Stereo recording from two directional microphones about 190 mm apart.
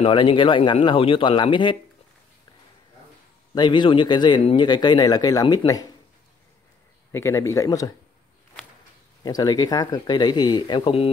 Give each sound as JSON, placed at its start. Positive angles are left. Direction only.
{"t": 0.0, "sound": "a man's voice", "side_deg": 25}
{"t": 3.5, "sound": "a man's voice", "side_deg": 25}
{"t": 7.1, "sound": "speech", "side_deg": 15}
{"t": 9.2, "sound": "a man's voice", "side_deg": 20}